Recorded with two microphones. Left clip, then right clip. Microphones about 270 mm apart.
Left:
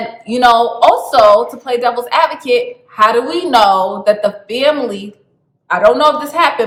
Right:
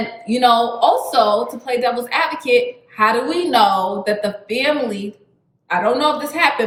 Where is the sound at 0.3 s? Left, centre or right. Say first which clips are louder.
Left 5 dB; centre.